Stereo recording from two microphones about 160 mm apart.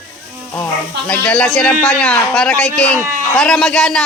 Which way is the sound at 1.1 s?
10° left (ahead or behind).